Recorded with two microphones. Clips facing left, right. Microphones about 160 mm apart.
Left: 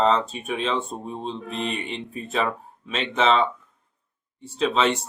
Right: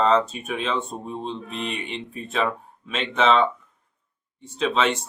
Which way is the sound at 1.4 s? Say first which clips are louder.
Left 2 dB; 35° left (ahead or behind).